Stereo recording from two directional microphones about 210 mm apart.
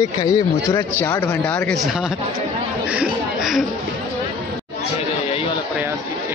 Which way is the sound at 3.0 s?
Centre (ahead or behind).